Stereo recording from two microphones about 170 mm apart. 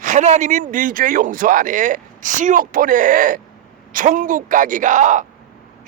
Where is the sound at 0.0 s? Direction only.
45° right (ahead or behind).